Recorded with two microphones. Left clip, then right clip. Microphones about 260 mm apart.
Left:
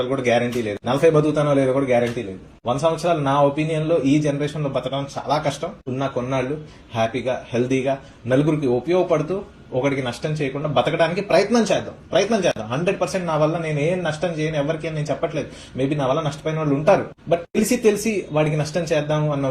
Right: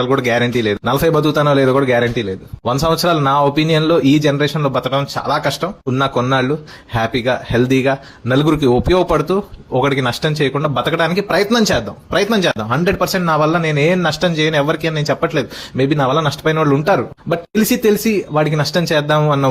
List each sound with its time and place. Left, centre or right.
0.0 s a man's voice: right